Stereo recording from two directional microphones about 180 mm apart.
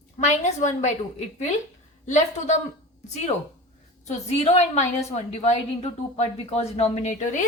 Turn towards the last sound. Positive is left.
turn(degrees=45)  # may be behind; listen again after turning